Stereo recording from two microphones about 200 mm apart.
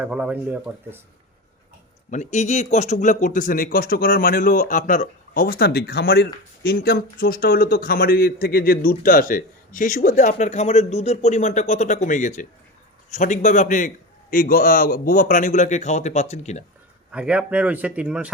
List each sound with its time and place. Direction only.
0.0 s speech: 5° right (ahead or behind)
2.0 s speech: 35° left (ahead or behind)
17.1 s speech: 5° right (ahead or behind)